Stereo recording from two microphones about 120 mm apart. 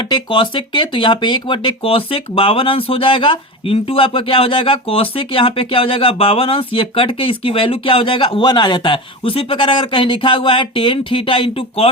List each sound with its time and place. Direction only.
0.1 s speech: 45° left (ahead or behind)